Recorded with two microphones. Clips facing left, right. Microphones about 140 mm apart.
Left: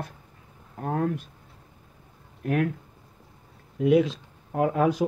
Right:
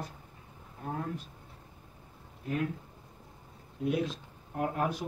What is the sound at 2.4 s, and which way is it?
Speech, 65° left (ahead or behind).